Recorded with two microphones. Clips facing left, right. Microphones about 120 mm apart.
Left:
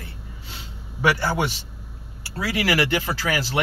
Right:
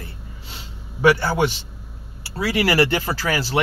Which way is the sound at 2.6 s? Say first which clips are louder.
Right 3 dB; 35° right (ahead or behind).